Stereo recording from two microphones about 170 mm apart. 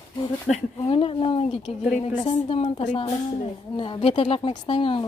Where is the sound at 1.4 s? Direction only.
45° left (ahead or behind).